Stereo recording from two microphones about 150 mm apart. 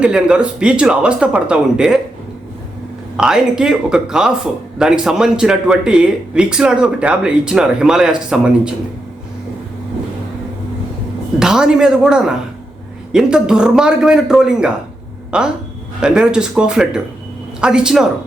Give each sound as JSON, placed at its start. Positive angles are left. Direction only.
{"t": 0.0, "sound": "speech", "side_deg": -5}
{"t": 3.2, "sound": "speech", "side_deg": -5}
{"t": 11.3, "sound": "speech", "side_deg": -5}